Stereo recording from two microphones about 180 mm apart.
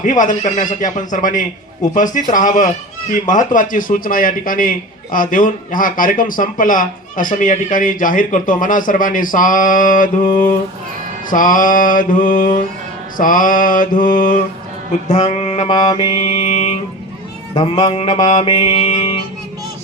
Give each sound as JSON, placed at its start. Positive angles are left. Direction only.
{"t": 0.0, "sound": "a man's voice", "side_deg": 45}
{"t": 15.1, "sound": "speech", "side_deg": 40}
{"t": 15.7, "sound": "mantra", "side_deg": 20}
{"t": 16.1, "sound": "speech", "side_deg": 35}
{"t": 18.5, "sound": "mantra", "side_deg": 30}